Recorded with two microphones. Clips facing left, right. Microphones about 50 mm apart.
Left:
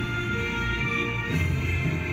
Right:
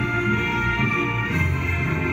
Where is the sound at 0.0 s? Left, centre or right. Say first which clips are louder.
Right 6 dB; right.